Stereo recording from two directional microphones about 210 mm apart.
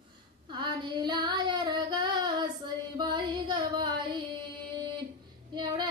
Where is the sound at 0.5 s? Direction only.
20° right (ahead or behind).